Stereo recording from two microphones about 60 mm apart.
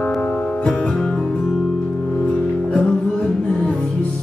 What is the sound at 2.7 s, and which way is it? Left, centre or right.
Music, centre.